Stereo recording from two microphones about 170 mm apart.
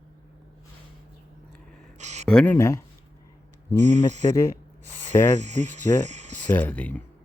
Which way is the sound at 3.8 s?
45° right (ahead or behind).